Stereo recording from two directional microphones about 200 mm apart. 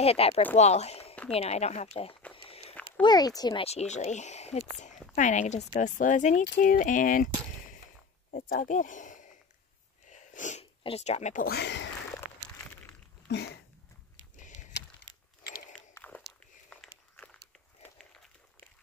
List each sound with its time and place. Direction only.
0.0 s speech: 30° left (ahead or behind)
2.3 s walk: 25° left (ahead or behind)
3.0 s speech: 20° left (ahead or behind); by 9.4 s 40° left (ahead or behind)
10.0 s a sound: 40° left (ahead or behind)
11.4 s speech: 55° left (ahead or behind)
13.3 s speech: 55° left (ahead or behind)
15.0 s a sound: 50° left (ahead or behind)
15.7 s walk: 10° left (ahead or behind)